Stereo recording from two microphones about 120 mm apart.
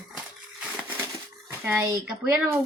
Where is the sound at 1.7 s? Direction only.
15° right (ahead or behind).